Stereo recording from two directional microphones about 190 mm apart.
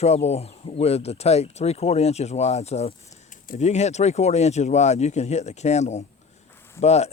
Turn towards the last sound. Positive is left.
turn(degrees=35)  # may be behind; listen again after turning